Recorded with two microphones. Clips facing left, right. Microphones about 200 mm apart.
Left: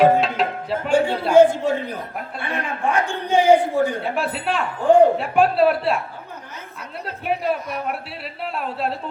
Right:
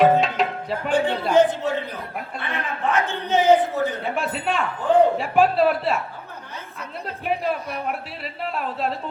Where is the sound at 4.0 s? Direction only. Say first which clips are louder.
Left 1 dB; centre (ahead or behind).